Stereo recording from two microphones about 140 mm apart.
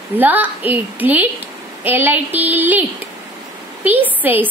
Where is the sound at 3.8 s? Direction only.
15° right (ahead or behind).